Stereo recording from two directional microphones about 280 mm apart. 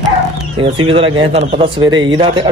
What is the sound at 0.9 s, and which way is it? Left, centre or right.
Speech, centre.